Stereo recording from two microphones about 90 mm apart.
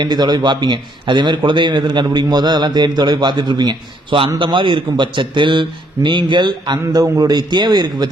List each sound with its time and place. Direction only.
0.0 s a man's voice: 50° right (ahead or behind)
4.4 s a man's voice: 65° right (ahead or behind); by 8.0 s 50° right (ahead or behind)